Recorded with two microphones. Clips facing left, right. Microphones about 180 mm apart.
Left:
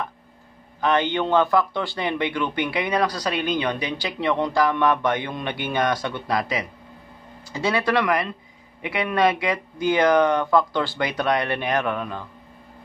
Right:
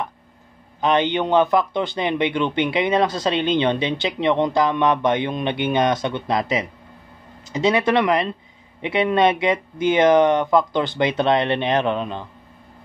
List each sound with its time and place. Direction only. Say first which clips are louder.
0.7 s a man's voice: right 2 dB; 20° right (ahead or behind)